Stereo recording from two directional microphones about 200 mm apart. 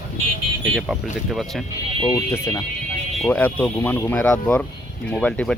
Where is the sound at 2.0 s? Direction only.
15° left (ahead or behind).